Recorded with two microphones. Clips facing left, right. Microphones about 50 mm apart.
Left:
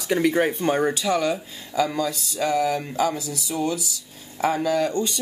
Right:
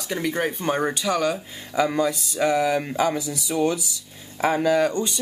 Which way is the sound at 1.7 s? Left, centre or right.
Right.